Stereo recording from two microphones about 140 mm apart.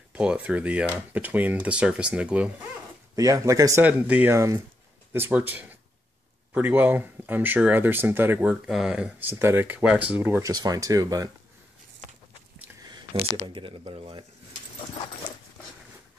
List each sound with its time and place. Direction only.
0.1 s speech: 5° right (ahead or behind)
3.2 s speech: 25° right (ahead or behind)
3.8 s speech: 10° right (ahead or behind)
8.6 s speech: 5° right (ahead or behind)
9.3 s speech: 15° right (ahead or behind)
10.4 s speech: 25° right (ahead or behind)
13.5 s speech: 35° right (ahead or behind)